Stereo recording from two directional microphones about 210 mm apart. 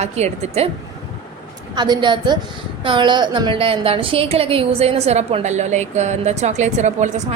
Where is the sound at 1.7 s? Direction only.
20° right (ahead or behind).